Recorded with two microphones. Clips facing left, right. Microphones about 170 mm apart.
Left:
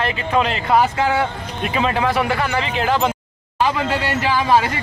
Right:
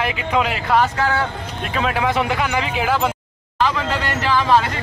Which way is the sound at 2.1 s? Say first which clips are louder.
Even; 15° right (ahead or behind).